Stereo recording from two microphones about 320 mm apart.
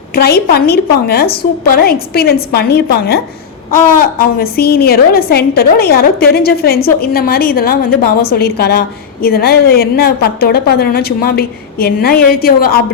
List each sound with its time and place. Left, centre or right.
0.1 s a woman's voice: left
4.2 s a woman's voice: left